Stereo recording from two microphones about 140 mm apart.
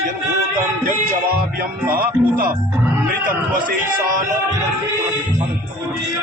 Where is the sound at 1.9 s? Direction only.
90° right.